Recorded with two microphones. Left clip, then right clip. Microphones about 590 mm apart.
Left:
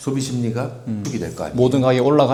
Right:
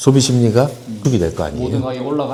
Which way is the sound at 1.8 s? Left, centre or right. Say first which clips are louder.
Left 7 dB; left.